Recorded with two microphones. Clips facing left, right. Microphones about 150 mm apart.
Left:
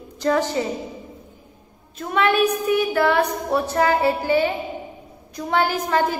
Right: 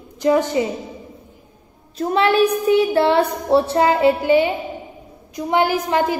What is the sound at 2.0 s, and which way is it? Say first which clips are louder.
A woman's voice: right 3 dB; 30° right (ahead or behind).